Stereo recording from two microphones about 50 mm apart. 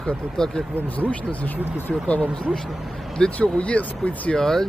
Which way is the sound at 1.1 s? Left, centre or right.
Left.